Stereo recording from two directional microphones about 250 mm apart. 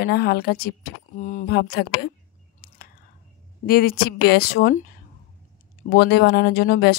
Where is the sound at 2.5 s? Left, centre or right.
Left.